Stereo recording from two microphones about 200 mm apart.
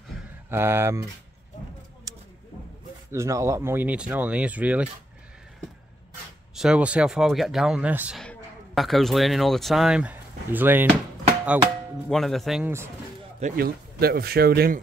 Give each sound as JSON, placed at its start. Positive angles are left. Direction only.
{"t": 0.5, "sound": "speech", "side_deg": -10}
{"t": 3.1, "sound": "speech", "side_deg": -15}
{"t": 6.5, "sound": "speech", "side_deg": -5}
{"t": 12.1, "sound": "speech", "side_deg": 0}
{"t": 13.4, "sound": "speech", "side_deg": -50}